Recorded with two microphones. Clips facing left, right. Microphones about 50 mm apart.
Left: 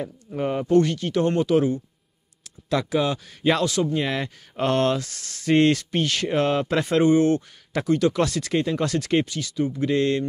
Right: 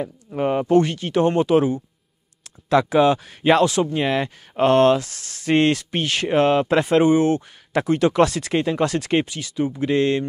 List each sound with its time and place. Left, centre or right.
0.0 s speech: centre
2.7 s speech: right
4.1 s speech: centre
5.9 s speech: right
7.8 s speech: right
8.8 s speech: centre